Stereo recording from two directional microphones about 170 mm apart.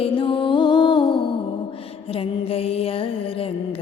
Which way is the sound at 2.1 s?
35° left (ahead or behind).